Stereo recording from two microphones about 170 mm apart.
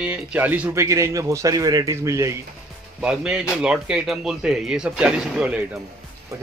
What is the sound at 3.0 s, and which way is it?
Speech, 5° right (ahead or behind).